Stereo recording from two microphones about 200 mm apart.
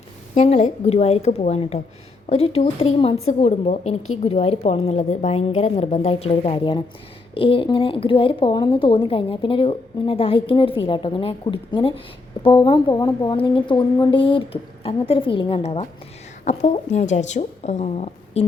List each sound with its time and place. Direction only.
0.3 s a woman's voice: 35° left (ahead or behind)